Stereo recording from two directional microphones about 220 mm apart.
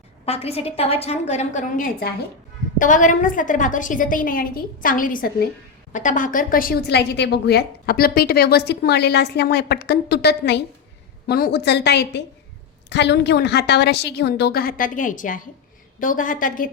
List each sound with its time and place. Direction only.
0.3 s a woman's voice: 25° left (ahead or behind)